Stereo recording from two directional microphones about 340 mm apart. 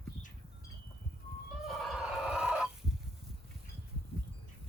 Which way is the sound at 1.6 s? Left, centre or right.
Centre.